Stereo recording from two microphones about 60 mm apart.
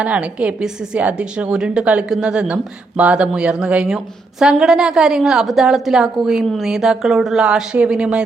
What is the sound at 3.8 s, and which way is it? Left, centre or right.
Speech, centre.